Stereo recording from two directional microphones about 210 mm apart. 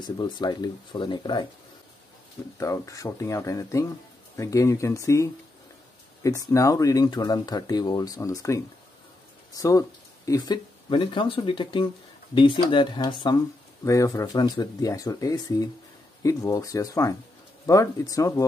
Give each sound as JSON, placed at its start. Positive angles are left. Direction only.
{"t": 0.0, "sound": "speech", "side_deg": 20}
{"t": 2.5, "sound": "speech", "side_deg": 15}